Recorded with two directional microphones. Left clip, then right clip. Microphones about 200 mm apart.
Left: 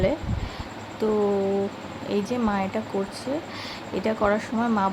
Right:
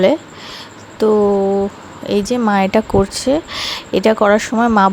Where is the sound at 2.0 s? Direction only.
40° right (ahead or behind).